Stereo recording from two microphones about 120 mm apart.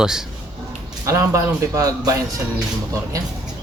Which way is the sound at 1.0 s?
25° right (ahead or behind).